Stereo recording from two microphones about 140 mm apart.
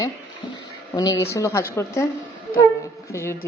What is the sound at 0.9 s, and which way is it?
Speech, 25° left (ahead or behind).